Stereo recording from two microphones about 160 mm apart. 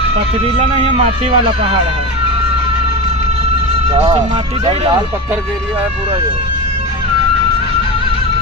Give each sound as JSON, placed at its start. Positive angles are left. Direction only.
{"t": 0.6, "sound": "speech", "side_deg": -35}
{"t": 3.9, "sound": "speech", "side_deg": -35}